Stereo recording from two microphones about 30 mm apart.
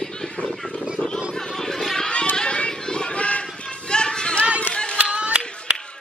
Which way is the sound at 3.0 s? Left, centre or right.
Left.